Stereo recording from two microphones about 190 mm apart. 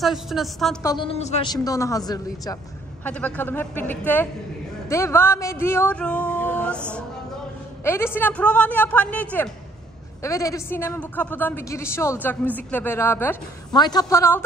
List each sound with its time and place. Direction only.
0.0 s a woman's voice: centre (ahead or behind)
0.8 s a woman's voice: 25° left (ahead or behind)
1.5 s a woman's voice: 20° left (ahead or behind)
3.1 s a woman's voice: 10° left (ahead or behind)
4.8 s a sound: 15° left (ahead or behind)
7.8 s a woman's voice: 15° left (ahead or behind)
13.7 s a woman's voice: 20° left (ahead or behind)